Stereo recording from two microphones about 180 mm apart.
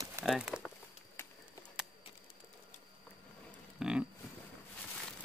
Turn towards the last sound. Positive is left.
turn(degrees=-5)  # may be behind; listen again after turning